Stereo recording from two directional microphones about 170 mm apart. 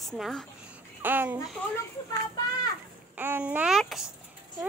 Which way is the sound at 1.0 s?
10° right (ahead or behind).